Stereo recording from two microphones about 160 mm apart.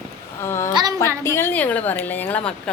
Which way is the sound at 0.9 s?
15° left (ahead or behind).